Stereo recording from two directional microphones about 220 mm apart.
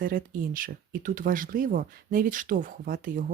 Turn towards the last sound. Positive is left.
turn(degrees=-40)  # may be behind; listen again after turning